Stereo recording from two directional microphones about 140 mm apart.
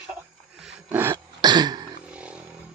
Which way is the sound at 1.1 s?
30° right (ahead or behind).